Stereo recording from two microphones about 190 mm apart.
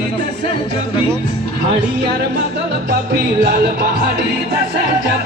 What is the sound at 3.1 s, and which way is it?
Music, 50° right (ahead or behind).